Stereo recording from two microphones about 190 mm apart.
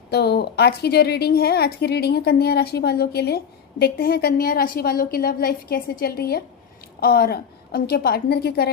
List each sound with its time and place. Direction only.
0.1 s a woman's voice: 60° left (ahead or behind)